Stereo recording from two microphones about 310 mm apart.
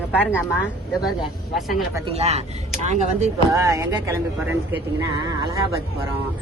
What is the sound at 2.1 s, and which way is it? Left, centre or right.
Speech, centre.